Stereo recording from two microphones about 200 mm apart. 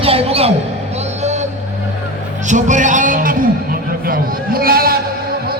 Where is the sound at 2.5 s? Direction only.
40° right (ahead or behind).